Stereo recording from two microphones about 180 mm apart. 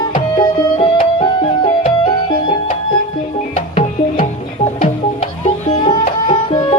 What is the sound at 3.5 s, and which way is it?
Music, 30° left (ahead or behind).